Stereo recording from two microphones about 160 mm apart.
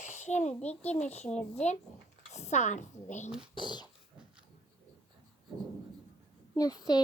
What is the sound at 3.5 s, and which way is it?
Speech, 30° left (ahead or behind).